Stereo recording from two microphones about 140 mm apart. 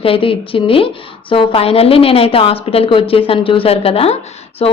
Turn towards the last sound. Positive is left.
turn(degrees=45)  # may be behind; listen again after turning